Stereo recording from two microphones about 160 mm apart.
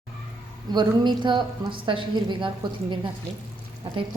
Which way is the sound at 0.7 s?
30° right (ahead or behind).